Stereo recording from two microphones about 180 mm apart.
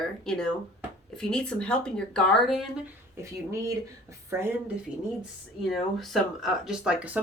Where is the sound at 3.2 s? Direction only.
15° right (ahead or behind).